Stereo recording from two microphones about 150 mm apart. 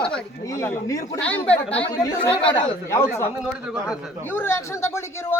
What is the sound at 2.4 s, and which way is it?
Speech, 35° left (ahead or behind).